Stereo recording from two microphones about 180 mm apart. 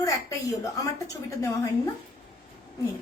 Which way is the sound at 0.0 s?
20° left (ahead or behind).